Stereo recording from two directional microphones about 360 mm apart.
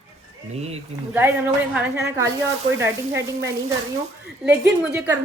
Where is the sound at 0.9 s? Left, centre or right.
Centre.